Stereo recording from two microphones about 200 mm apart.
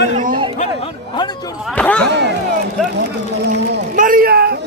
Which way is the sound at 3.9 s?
45° right (ahead or behind).